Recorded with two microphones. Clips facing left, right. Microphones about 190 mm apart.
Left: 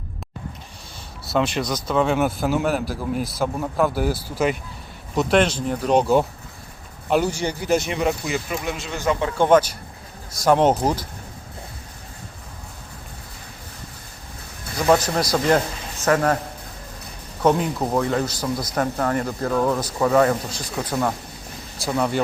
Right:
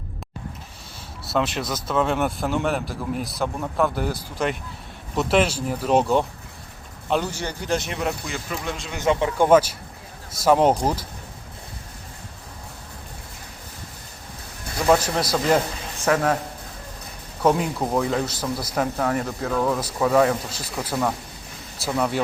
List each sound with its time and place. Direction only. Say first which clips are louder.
1.2 s a man's voice: left 2 dB; centre (ahead or behind)
7.1 s a man's voice: left 4 dB; 10° left (ahead or behind)
8.9 s a man's voice: right 2 dB; 20° right (ahead or behind)
10.3 s a man's voice: left 1 dB; 5° right (ahead or behind)
14.8 s a man's voice: left 1 dB; 5° right (ahead or behind)
17.4 s a man's voice: left 1 dB; centre (ahead or behind)